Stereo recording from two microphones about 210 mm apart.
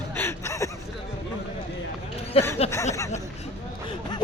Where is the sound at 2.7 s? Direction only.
15° left (ahead or behind).